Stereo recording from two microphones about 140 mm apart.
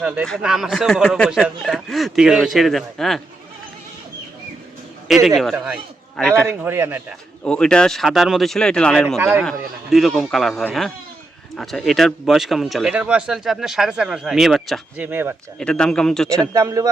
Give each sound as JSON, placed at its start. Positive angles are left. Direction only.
{"t": 0.0, "sound": "speech", "side_deg": -5}
{"t": 5.0, "sound": "a man's voice", "side_deg": 0}
{"t": 6.5, "sound": "speech", "side_deg": -15}
{"t": 7.4, "sound": "speech", "side_deg": 5}
{"t": 9.1, "sound": "speech", "side_deg": -20}
{"t": 9.4, "sound": "speech", "side_deg": 0}
{"t": 15.5, "sound": "speech", "side_deg": 5}
{"t": 16.5, "sound": "speech", "side_deg": -25}